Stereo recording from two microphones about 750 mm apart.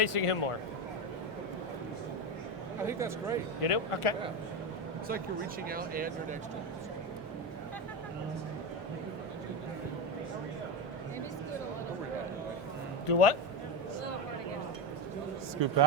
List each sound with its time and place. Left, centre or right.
0.0 s a man's voice: left
2.8 s speech: centre
3.6 s speech: left
5.6 s speech: centre
13.1 s a man's voice: left
15.6 s speech: right